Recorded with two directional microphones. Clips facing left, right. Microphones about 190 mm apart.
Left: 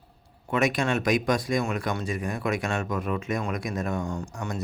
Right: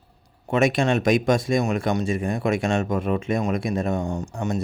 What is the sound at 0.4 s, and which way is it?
Speech, 25° right (ahead or behind).